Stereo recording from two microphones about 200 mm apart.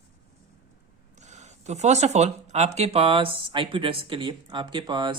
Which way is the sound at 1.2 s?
35° right (ahead or behind).